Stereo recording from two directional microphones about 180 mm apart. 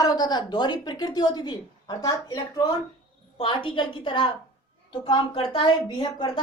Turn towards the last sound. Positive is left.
turn(degrees=25)  # may be behind; listen again after turning